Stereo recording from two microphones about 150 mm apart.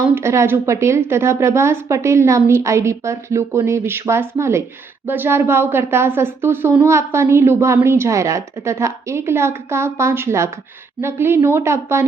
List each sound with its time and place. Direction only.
0.0 s a woman's voice: 15° right (ahead or behind)